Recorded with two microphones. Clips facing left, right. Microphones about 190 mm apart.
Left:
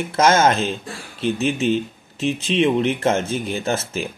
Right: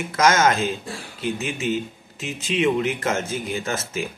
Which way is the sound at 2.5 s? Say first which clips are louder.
Left 2 dB; 30° left (ahead or behind).